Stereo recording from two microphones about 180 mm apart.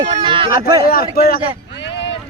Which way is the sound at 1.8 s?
80° left.